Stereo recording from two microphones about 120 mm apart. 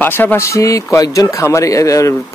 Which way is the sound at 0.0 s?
15° left (ahead or behind).